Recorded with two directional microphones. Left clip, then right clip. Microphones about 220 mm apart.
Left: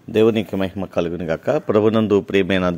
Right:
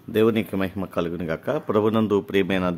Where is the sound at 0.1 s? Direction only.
10° left (ahead or behind).